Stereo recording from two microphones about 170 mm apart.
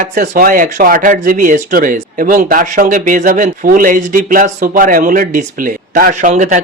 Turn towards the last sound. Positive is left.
turn(degrees=-50)  # may be behind; listen again after turning